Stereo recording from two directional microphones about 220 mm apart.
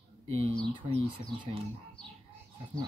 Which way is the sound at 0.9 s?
25° right (ahead or behind).